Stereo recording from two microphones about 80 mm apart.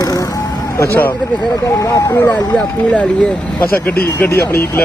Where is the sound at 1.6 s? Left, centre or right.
Left.